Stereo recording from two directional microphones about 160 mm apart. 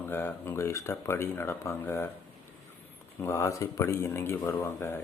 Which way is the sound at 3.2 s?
15° left (ahead or behind).